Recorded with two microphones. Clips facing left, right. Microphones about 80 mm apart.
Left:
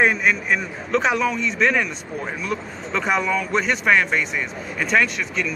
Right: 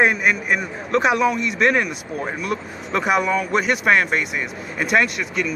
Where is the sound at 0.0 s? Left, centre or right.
Centre.